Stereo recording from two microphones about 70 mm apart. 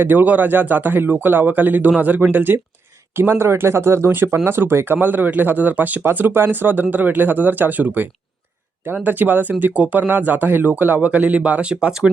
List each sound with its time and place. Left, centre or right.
0.0 s speech: right
9.0 s speech: right; by 12.1 s centre